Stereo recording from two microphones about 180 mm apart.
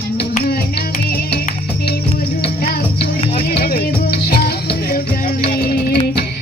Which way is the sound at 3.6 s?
55° left (ahead or behind).